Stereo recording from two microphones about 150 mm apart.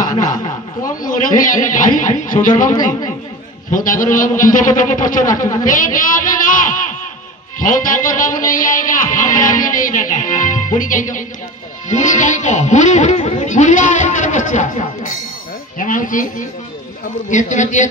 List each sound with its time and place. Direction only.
0.8 s music: 65° left (ahead or behind)
7.6 s music: 65° left (ahead or behind)